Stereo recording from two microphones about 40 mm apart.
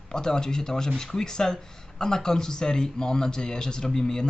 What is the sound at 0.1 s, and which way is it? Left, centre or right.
Speech, centre.